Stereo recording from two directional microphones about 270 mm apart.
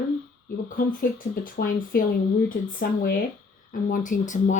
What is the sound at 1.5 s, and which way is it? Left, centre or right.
Speech, left.